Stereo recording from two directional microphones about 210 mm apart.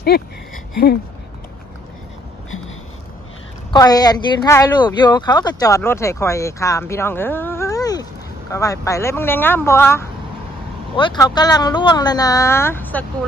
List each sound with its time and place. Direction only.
3.7 s speech: 20° left (ahead or behind)
11.0 s speech: 20° left (ahead or behind)